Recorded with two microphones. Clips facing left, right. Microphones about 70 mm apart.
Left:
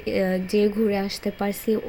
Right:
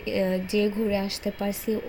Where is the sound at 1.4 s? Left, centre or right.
Left.